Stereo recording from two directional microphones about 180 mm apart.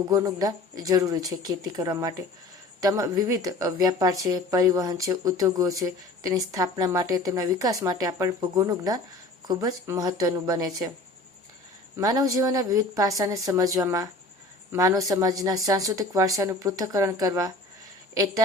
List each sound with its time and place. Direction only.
0.1 s speech: 20° right (ahead or behind)
11.9 s speech: 20° right (ahead or behind)